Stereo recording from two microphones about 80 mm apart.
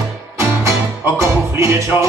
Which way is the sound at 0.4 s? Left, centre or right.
Right.